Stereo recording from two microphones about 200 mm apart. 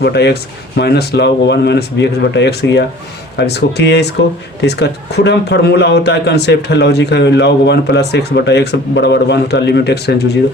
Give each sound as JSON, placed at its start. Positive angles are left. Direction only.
{"t": 0.0, "sound": "a man's voice", "side_deg": 55}